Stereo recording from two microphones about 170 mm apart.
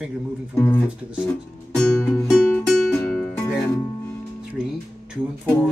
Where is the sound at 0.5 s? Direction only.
15° left (ahead or behind).